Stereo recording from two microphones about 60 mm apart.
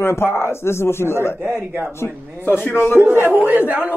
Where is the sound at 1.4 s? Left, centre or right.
Right.